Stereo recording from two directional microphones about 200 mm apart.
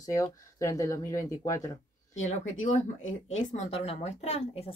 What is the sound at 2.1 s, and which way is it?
Speech, 35° left (ahead or behind).